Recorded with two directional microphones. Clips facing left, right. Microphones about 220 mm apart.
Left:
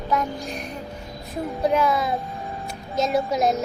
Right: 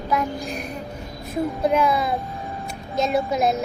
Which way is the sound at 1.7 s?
10° right (ahead or behind).